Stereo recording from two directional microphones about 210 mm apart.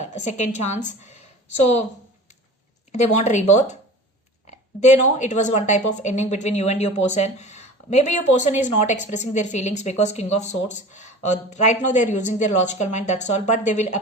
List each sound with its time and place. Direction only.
0.0 s a woman's voice: 35° left (ahead or behind)
2.9 s speech: 35° left (ahead or behind)